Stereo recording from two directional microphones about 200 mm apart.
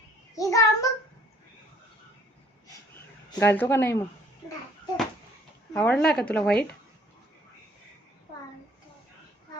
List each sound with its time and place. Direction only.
0.3 s a woman's voice: 15° left (ahead or behind)
3.3 s a woman's voice: 10° left (ahead or behind)
5.7 s speech: 5° left (ahead or behind)